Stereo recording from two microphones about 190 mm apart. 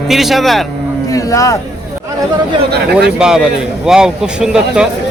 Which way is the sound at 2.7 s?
60° right (ahead or behind).